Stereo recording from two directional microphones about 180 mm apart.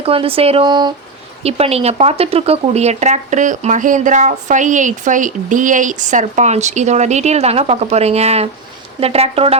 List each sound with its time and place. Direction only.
0.0 s speech: 30° right (ahead or behind)
1.5 s speech: 35° right (ahead or behind)